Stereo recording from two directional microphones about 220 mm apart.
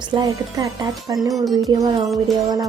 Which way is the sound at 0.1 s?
15° right (ahead or behind).